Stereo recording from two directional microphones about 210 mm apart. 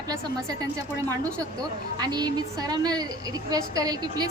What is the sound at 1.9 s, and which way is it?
A woman's voice, 20° right (ahead or behind).